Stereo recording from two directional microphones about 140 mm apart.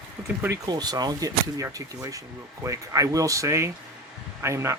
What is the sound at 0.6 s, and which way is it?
Speech, 30° right (ahead or behind).